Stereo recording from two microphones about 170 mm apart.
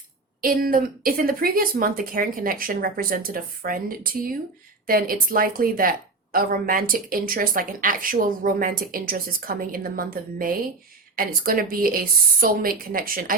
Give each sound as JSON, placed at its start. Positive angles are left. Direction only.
{"t": 0.4, "sound": "a woman's voice", "side_deg": -60}